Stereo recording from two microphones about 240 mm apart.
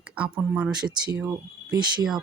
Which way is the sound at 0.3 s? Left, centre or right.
Centre.